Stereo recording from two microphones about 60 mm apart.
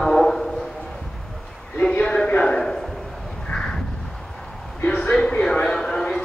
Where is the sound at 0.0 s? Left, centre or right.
Centre.